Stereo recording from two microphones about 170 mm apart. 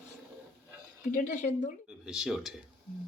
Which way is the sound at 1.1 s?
50° left (ahead or behind).